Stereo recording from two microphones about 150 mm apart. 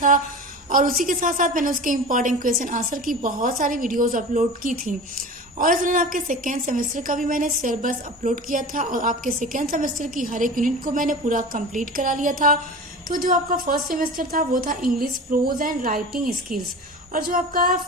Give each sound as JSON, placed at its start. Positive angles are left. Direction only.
{"t": 0.7, "sound": "a woman's voice", "side_deg": -65}
{"t": 17.1, "sound": "a woman's voice", "side_deg": -70}